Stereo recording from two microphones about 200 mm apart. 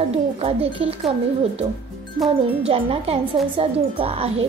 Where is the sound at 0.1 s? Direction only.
30° right (ahead or behind).